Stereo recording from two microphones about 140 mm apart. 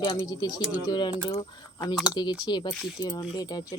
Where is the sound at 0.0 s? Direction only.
30° left (ahead or behind).